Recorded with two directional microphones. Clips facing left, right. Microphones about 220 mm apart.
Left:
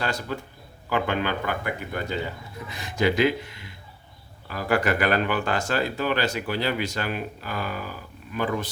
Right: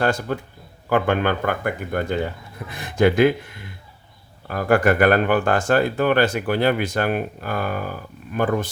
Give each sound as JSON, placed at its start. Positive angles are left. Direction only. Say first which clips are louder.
{"t": 0.0, "sound": "speech", "louder": "right 7 dB", "side_deg": -50}